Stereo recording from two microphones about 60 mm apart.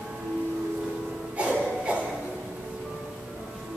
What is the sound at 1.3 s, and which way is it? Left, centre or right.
Music, centre.